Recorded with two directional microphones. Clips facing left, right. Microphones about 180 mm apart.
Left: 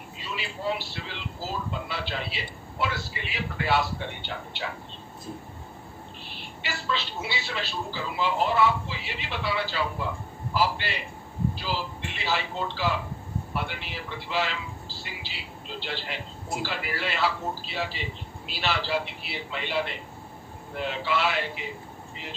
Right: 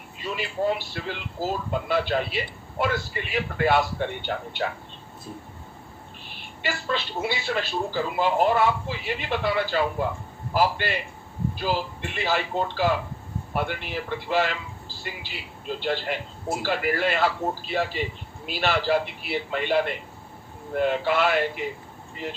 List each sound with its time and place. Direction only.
0.2 s speech: 50° right (ahead or behind)
6.3 s speech: 50° right (ahead or behind)
12.1 s speech: 50° right (ahead or behind)